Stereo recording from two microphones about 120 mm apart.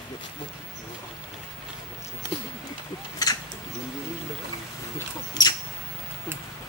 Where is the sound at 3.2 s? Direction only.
30° left (ahead or behind).